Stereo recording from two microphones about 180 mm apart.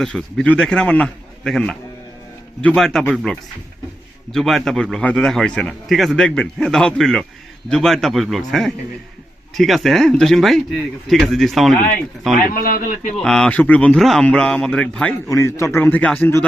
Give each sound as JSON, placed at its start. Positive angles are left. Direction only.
{"t": 0.0, "sound": "a man's voice", "side_deg": 5}
{"t": 12.5, "sound": "speech", "side_deg": 55}
{"t": 13.2, "sound": "a man's voice", "side_deg": 5}
{"t": 15.3, "sound": "a man's voice", "side_deg": 15}